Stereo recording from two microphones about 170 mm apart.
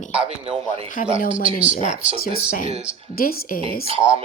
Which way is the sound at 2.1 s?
60° left (ahead or behind).